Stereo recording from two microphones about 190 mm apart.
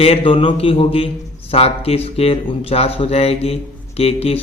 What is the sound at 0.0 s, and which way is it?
A man's voice, 30° left (ahead or behind).